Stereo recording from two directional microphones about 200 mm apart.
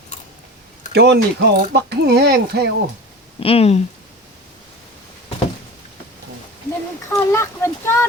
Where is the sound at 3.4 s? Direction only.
30° left (ahead or behind).